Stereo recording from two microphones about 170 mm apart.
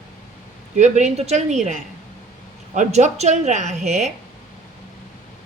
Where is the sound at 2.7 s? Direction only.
40° right (ahead or behind).